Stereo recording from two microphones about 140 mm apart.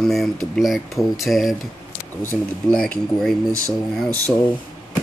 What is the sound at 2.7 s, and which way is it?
Speech, 5° left (ahead or behind).